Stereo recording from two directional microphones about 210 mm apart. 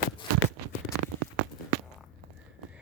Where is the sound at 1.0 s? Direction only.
70° right (ahead or behind).